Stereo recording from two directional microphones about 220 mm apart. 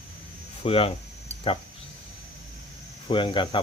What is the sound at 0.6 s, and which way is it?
Speech, 25° left (ahead or behind).